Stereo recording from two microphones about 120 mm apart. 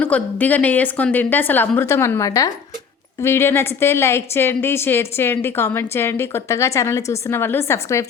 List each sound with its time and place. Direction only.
0.0 s a woman's voice: 10° left (ahead or behind)